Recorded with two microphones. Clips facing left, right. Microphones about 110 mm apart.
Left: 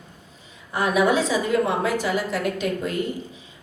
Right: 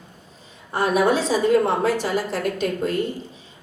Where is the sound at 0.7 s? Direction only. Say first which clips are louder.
Right 1 dB; 30° right (ahead or behind).